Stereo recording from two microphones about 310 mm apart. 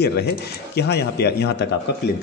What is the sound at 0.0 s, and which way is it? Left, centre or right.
Speech, left.